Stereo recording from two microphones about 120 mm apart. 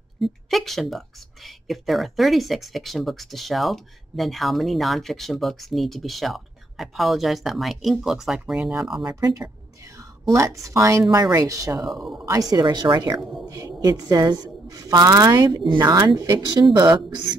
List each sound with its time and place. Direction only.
0.2 s speech: centre (ahead or behind)
10.3 s speech: 25° right (ahead or behind)
11.8 s speech: centre (ahead or behind)
12.3 s a woman's voice: 30° right (ahead or behind)